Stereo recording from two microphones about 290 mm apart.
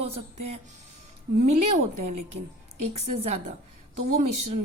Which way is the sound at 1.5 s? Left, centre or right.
Right.